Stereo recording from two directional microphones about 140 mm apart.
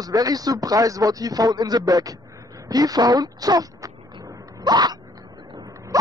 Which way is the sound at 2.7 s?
25° right (ahead or behind).